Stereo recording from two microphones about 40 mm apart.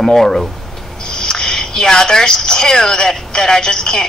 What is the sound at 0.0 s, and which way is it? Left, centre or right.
A woman's voice, centre.